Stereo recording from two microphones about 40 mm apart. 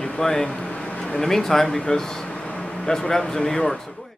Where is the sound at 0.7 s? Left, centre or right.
Left.